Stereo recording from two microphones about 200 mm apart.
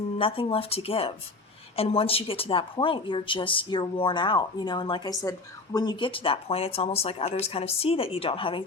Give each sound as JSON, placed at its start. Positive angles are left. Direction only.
{"t": 0.2, "sound": "speech", "side_deg": 25}